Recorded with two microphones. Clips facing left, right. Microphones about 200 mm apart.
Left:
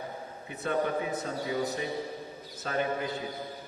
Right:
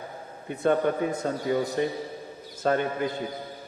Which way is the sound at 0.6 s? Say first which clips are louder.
Right 6 dB; 50° right (ahead or behind).